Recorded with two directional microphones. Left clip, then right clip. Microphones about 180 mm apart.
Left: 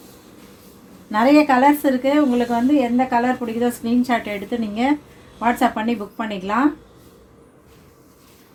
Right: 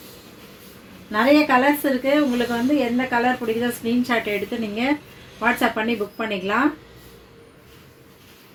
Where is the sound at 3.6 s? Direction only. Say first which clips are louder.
Left 3 dB; 50° left (ahead or behind).